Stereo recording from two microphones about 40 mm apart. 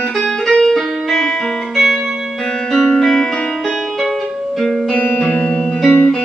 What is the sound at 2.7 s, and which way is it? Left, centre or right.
Music, centre.